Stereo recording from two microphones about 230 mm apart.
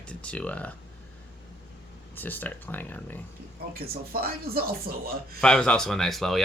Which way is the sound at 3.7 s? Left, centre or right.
Right.